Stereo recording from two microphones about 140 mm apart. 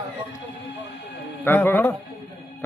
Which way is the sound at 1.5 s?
15° left (ahead or behind).